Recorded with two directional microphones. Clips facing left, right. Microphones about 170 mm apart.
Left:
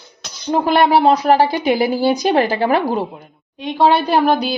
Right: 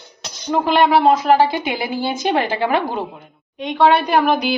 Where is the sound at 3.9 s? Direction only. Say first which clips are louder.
Left 2 dB; 30° left (ahead or behind).